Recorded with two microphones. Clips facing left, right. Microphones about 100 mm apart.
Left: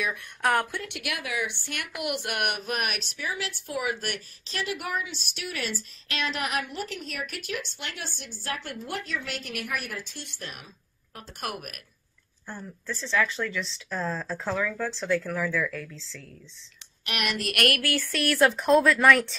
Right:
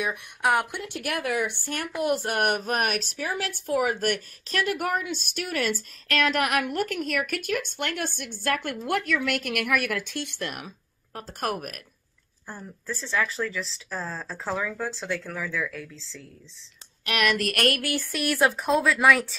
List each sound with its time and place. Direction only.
0.4 s speech: 10° right (ahead or behind)
0.8 s a woman's voice: 40° right (ahead or behind); by 10.7 s 60° right (ahead or behind)
11.1 s speech: 40° right (ahead or behind)
12.4 s speech: 10° right (ahead or behind)
14.6 s speech: 15° right (ahead or behind)
14.9 s speech: centre (ahead or behind)
17.0 s speech: 40° right (ahead or behind)
17.6 s speech: 25° right (ahead or behind); by 19.3 s 5° right (ahead or behind)